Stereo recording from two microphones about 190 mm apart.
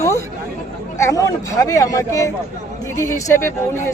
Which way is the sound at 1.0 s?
15° left (ahead or behind).